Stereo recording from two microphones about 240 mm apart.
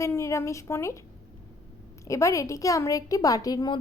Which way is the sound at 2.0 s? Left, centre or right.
Centre.